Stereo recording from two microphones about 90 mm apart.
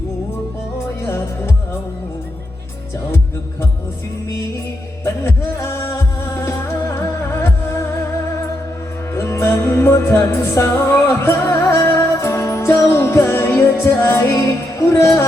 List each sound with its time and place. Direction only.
1.0 s music: 30° left (ahead or behind)
5.0 s music: 30° left (ahead or behind)
9.1 s music: 30° left (ahead or behind)